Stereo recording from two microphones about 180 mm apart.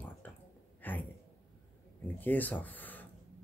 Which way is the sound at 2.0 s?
10° left (ahead or behind).